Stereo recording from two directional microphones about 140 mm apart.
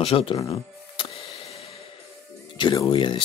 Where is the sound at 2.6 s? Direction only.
35° left (ahead or behind).